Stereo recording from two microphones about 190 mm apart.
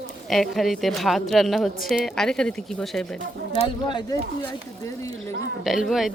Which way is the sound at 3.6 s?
25° left (ahead or behind).